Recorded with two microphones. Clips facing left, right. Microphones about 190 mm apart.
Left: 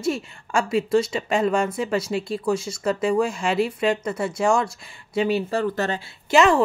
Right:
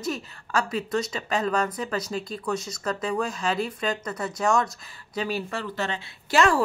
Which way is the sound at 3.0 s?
10° left (ahead or behind).